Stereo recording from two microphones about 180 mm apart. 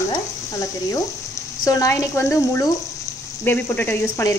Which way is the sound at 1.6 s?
20° left (ahead or behind).